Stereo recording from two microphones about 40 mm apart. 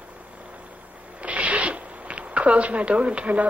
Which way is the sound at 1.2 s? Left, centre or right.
Right.